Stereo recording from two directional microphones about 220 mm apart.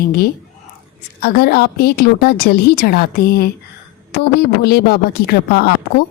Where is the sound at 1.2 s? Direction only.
45° left (ahead or behind).